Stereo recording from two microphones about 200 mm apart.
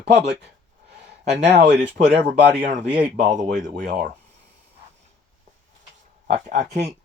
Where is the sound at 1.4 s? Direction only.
60° right (ahead or behind).